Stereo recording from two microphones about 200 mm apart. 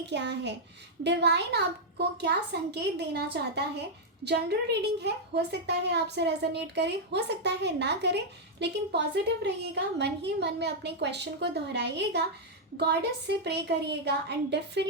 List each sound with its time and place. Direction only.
0.0 s speech: 60° right (ahead or behind)